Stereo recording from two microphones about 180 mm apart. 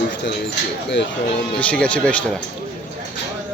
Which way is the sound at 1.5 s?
5° left (ahead or behind).